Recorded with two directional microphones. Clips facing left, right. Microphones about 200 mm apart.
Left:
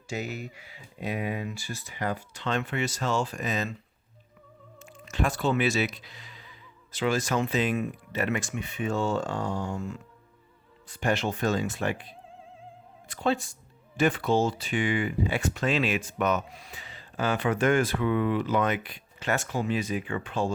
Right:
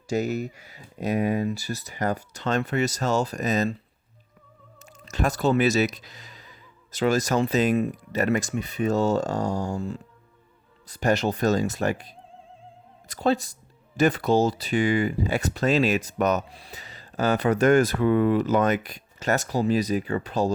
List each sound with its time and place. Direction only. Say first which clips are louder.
0.1 s speech: right 8 dB; 40° right (ahead or behind)
4.8 s speech: right 2 dB; 40° right (ahead or behind)